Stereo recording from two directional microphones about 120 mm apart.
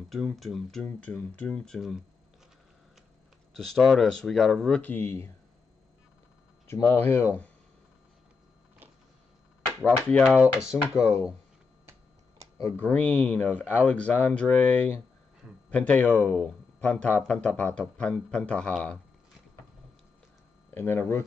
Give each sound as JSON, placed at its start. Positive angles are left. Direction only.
{"t": 0.1, "sound": "speech", "side_deg": 0}
{"t": 0.8, "sound": "speech", "side_deg": 10}
{"t": 3.5, "sound": "speech", "side_deg": 0}
{"t": 4.9, "sound": "speech", "side_deg": 20}
{"t": 6.7, "sound": "speech", "side_deg": 15}
{"t": 9.8, "sound": "speech", "side_deg": 10}
{"t": 10.2, "sound": "speech", "side_deg": -15}
{"t": 10.7, "sound": "speech", "side_deg": 10}
{"t": 12.7, "sound": "speech", "side_deg": 10}
{"t": 20.7, "sound": "speech", "side_deg": 20}